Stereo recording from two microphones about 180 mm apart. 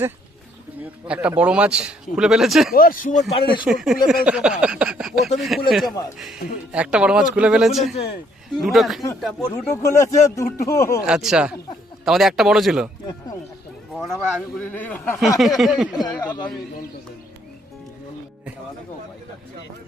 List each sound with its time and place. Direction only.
1.0 s speech: 5° right (ahead or behind)
2.7 s speech: 50° left (ahead or behind); by 3.6 s 35° left (ahead or behind)
3.6 s speech: centre (ahead or behind)
9.4 s speech: 15° left (ahead or behind)
11.0 s speech: 5° right (ahead or behind)
13.9 s speech: centre (ahead or behind)
15.4 s speech: centre (ahead or behind)
15.9 s speech: 25° left (ahead or behind)